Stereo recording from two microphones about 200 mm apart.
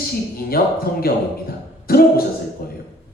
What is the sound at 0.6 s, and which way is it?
Speech, 50° left (ahead or behind).